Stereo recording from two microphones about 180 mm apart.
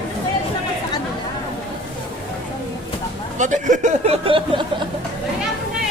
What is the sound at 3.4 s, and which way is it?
Speech, 45° right (ahead or behind).